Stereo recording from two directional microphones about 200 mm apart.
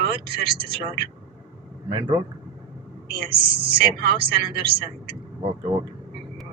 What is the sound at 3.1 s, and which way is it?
Speech, 50° right (ahead or behind).